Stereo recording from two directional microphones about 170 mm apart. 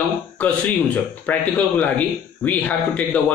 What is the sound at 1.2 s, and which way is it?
A man's voice, 10° left (ahead or behind).